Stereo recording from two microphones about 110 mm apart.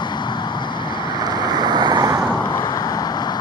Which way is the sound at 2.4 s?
30° left (ahead or behind).